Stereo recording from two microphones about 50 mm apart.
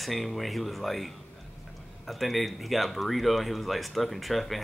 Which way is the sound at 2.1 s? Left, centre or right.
Centre.